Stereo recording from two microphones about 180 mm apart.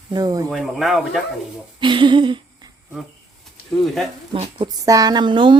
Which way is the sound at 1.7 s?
25° right (ahead or behind).